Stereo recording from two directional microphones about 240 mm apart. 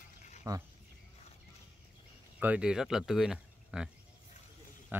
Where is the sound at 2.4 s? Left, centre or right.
Centre.